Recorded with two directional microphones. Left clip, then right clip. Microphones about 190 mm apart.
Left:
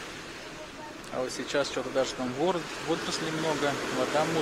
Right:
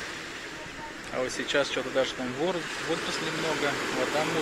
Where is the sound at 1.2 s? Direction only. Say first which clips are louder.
Right 2 dB; centre (ahead or behind).